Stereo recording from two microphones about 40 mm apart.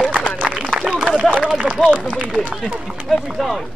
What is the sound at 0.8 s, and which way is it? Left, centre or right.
Run, centre.